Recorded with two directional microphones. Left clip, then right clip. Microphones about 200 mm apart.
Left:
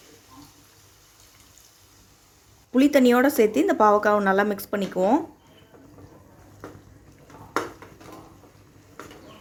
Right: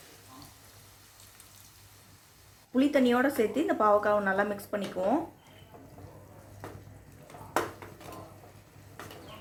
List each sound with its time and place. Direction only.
2.7 s speech: 50° left (ahead or behind)